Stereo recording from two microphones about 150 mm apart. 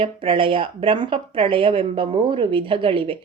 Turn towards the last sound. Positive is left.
turn(degrees=-35)  # may be behind; listen again after turning